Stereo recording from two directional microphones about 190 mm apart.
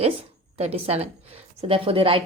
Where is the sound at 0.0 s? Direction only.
35° right (ahead or behind).